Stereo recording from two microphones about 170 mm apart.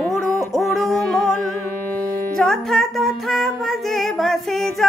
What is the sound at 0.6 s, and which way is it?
Music, centre (ahead or behind).